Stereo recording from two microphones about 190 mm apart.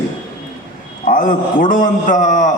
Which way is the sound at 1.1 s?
45° left (ahead or behind).